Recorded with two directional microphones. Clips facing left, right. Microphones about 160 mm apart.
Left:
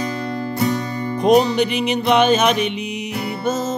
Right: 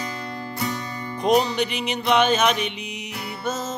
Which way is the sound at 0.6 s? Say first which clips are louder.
Left 8 dB; 40° left (ahead or behind).